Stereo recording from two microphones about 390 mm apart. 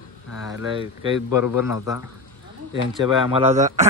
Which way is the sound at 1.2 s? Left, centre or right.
Left.